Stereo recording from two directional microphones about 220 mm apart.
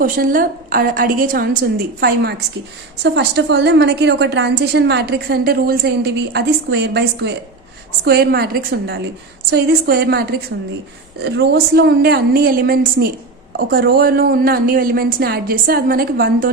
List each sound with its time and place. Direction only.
0.0 s a woman's voice: 40° right (ahead or behind)